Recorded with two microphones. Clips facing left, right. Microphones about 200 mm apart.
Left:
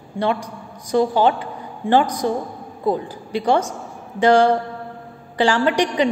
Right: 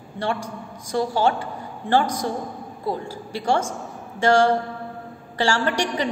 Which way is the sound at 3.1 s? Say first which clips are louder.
Left 4 dB; 15° left (ahead or behind).